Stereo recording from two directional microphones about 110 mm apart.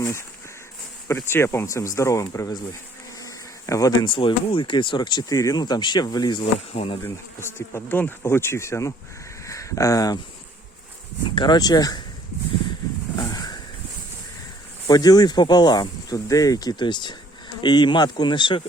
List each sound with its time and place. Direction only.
0.0 s speech: 25° left (ahead or behind)
1.0 s bee: 20° left (ahead or behind)
3.2 s cricket: 30° left (ahead or behind)
4.1 s speech: 50° left (ahead or behind)
5.3 s speech: 30° left (ahead or behind)
6.4 s speech: 65° left (ahead or behind)
7.0 s bee: 25° left (ahead or behind)
9.5 s speech: 30° left (ahead or behind)
11.3 s speech: 40° left (ahead or behind)
13.1 s a sound: 35° left (ahead or behind)
14.8 s speech: 35° left (ahead or behind)